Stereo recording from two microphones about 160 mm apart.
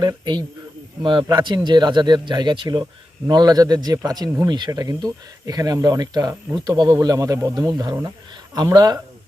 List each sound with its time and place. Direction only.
0.0 s speech: 30° right (ahead or behind)